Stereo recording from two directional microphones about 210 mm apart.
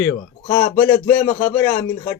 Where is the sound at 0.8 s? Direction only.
15° left (ahead or behind).